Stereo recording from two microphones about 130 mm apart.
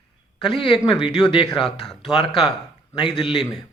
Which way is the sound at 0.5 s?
40° left (ahead or behind).